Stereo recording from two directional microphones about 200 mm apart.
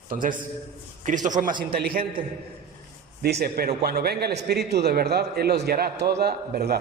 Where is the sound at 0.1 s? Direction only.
40° right (ahead or behind).